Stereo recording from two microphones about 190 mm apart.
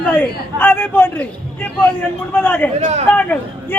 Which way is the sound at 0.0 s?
10° left (ahead or behind).